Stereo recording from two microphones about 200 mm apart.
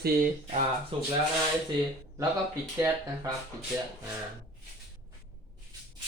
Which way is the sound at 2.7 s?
10° right (ahead or behind).